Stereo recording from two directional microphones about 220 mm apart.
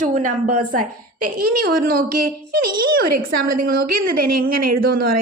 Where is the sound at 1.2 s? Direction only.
90° right.